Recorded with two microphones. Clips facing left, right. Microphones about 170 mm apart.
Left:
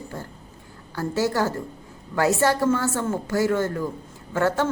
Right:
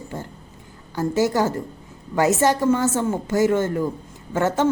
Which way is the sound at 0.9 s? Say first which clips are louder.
Right 3 dB; 15° right (ahead or behind).